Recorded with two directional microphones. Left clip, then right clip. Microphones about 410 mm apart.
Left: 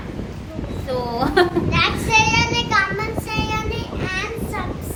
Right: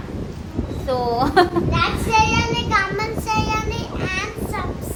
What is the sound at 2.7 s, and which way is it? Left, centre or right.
Child singing, centre.